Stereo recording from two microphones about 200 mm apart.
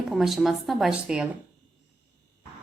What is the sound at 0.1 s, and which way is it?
A woman's voice, centre (ahead or behind).